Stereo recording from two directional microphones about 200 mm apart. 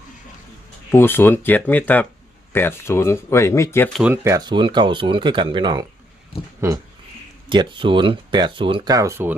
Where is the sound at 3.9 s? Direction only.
5° right (ahead or behind).